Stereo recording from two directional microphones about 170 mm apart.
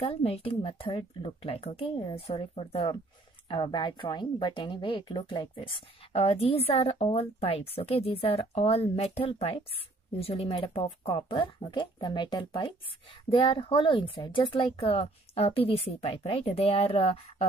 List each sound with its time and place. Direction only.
0.0 s a woman's voice: 35° left (ahead or behind)